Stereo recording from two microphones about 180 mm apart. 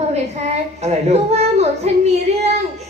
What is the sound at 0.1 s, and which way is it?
A woman's voice, 35° right (ahead or behind).